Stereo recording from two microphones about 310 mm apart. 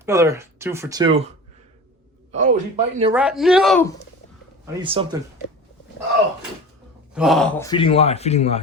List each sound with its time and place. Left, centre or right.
0.0 s speech: centre
2.3 s speech: right
3.1 s speech: centre
4.6 s speech: centre
7.1 s speech: centre
7.7 s speech: centre